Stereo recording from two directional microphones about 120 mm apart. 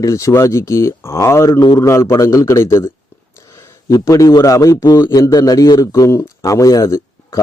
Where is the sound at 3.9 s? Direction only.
30° left (ahead or behind).